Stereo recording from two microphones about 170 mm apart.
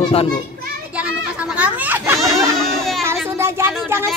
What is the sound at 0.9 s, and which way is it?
Children playing, 5° right (ahead or behind).